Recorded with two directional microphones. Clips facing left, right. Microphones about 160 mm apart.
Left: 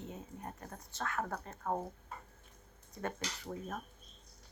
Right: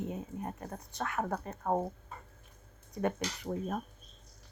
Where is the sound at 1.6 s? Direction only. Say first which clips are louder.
Right 5 dB; 35° right (ahead or behind).